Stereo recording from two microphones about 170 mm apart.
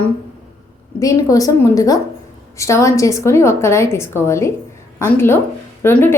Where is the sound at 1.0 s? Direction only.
20° left (ahead or behind).